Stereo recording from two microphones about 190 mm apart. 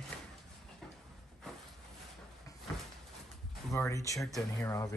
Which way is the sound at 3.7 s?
15° left (ahead or behind).